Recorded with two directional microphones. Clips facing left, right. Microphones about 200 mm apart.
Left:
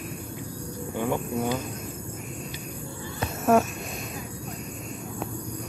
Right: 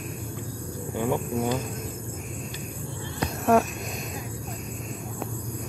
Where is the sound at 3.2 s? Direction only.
Centre (ahead or behind).